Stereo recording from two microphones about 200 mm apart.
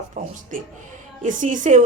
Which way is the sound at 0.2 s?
35° right (ahead or behind).